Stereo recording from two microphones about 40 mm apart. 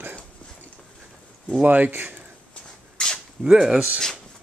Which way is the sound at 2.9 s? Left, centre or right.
Centre.